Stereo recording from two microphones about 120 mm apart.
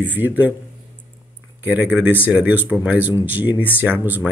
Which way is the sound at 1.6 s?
15° right (ahead or behind).